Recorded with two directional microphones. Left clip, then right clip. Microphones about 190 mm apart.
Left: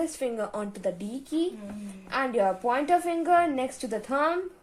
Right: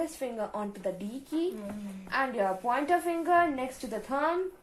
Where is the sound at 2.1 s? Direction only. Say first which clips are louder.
Left 3 dB; 50° left (ahead or behind).